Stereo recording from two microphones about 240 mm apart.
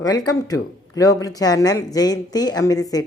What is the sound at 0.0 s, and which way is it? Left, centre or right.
A woman's voice, centre.